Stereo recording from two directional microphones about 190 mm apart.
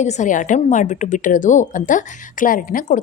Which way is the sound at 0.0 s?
40° left (ahead or behind).